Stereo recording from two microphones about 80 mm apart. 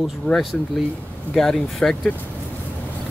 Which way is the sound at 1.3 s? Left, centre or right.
Centre.